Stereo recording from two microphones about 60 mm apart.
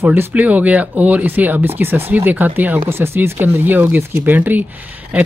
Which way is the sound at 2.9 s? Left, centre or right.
Right.